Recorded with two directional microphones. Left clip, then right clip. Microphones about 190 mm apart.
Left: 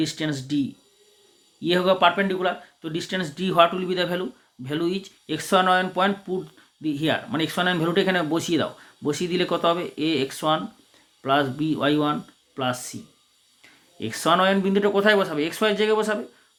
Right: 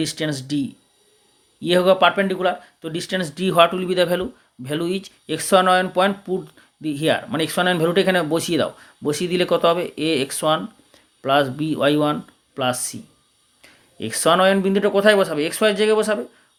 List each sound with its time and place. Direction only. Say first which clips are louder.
0.0 s speech: right 2 dB; 35° right (ahead or behind)